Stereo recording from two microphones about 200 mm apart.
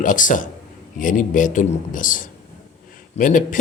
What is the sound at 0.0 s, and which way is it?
A man's voice, 40° left (ahead or behind).